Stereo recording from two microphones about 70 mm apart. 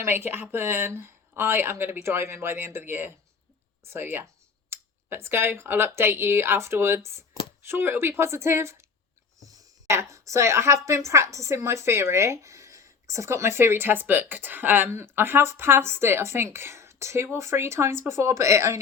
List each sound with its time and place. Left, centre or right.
0.0 s a woman's voice: right